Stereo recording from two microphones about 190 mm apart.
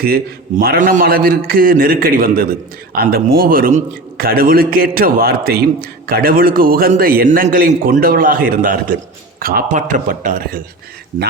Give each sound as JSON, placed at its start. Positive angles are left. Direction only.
{"t": 0.0, "sound": "a man's voice", "side_deg": -55}